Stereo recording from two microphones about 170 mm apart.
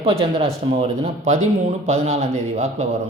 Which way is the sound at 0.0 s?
35° right (ahead or behind).